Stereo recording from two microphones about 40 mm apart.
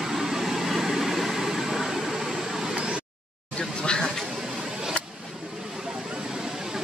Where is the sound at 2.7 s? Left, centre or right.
Right.